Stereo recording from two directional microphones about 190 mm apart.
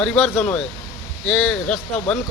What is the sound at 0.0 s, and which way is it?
Speech, 5° left (ahead or behind).